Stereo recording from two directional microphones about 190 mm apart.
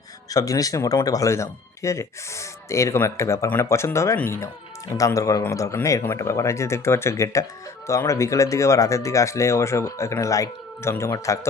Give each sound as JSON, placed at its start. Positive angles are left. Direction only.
{"t": 0.3, "sound": "speech", "side_deg": 20}